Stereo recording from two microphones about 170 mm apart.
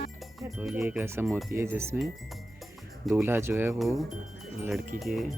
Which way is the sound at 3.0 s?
10° right (ahead or behind).